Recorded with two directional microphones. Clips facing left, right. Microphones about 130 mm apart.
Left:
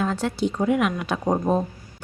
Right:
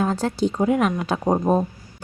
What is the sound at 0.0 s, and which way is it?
Speech, 35° right (ahead or behind).